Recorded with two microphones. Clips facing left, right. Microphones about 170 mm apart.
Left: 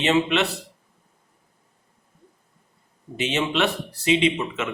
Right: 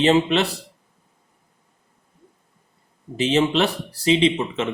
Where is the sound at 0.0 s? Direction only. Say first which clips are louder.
Right 3 dB; 35° right (ahead or behind).